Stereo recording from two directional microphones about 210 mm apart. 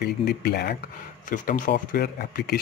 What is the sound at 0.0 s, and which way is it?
Speech, 45° left (ahead or behind).